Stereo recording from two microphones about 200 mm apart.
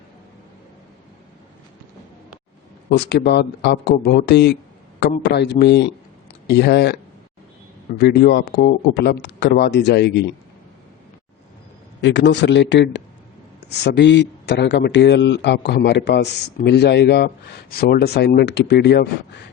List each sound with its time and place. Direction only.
3.1 s speech: 55° left (ahead or behind)
7.9 s speech: 55° left (ahead or behind)
12.0 s speech: 60° left (ahead or behind)